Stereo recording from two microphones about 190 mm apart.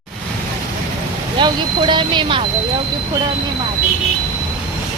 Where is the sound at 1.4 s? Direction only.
25° right (ahead or behind).